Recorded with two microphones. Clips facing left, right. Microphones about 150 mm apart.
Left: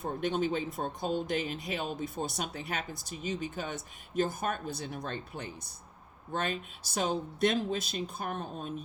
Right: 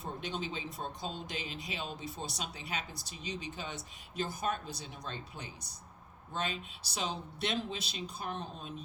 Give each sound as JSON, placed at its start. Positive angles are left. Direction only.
{"t": 0.0, "sound": "speech", "side_deg": 50}